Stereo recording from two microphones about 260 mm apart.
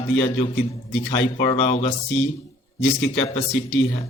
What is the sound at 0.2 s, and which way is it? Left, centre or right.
A man's voice, left.